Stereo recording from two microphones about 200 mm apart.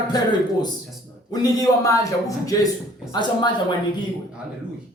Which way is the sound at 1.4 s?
20° left (ahead or behind).